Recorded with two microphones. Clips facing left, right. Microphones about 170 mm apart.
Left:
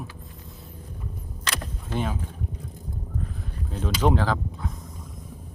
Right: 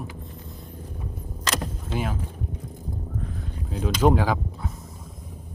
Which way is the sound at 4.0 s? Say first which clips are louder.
Right 2 dB; 10° right (ahead or behind).